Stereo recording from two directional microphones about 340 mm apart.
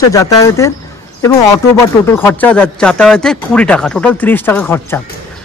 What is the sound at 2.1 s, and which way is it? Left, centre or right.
Speech, centre.